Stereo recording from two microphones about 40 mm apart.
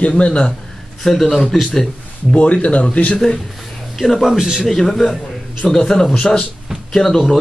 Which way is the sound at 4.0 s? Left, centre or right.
Centre.